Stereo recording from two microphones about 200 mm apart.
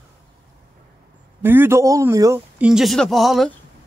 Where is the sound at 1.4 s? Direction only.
10° right (ahead or behind).